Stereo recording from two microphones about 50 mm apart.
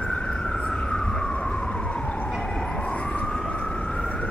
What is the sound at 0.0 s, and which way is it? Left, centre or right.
Emergency vehicle, centre.